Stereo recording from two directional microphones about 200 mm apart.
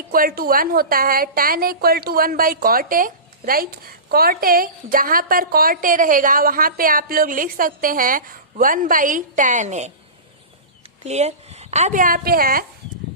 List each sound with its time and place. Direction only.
0.1 s a woman's voice: 45° right (ahead or behind)
11.0 s speech: 35° right (ahead or behind)